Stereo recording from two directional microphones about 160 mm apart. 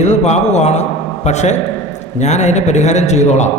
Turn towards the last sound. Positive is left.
turn(degrees=45)  # may be behind; listen again after turning